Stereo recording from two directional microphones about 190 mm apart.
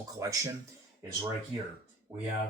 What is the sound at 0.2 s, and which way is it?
Speech, 15° right (ahead or behind).